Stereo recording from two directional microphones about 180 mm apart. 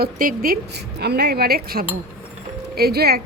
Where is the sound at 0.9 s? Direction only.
65° right (ahead or behind).